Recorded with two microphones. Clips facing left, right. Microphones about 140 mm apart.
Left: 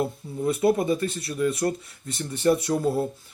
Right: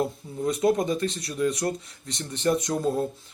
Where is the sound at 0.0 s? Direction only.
5° left (ahead or behind).